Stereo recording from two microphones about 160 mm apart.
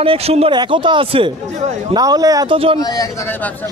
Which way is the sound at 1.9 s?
25° right (ahead or behind).